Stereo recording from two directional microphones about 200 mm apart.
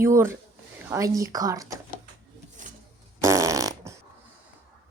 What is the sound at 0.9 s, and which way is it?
Speech, 15° right (ahead or behind).